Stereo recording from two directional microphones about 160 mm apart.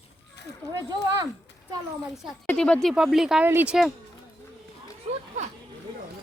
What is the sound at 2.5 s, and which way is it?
Speech, 5° left (ahead or behind).